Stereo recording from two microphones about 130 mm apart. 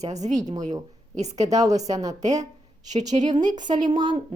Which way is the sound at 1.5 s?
25° right (ahead or behind).